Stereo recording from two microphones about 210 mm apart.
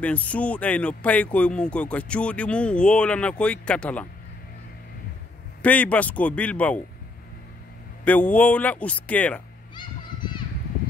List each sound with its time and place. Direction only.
0.0 s speech: 5° left (ahead or behind)
5.6 s speech: 5° left (ahead or behind)
8.0 s speech: 5° left (ahead or behind)
9.8 s children playing: 20° left (ahead or behind)